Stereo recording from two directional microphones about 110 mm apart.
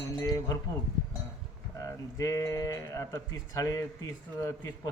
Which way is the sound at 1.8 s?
30° left (ahead or behind).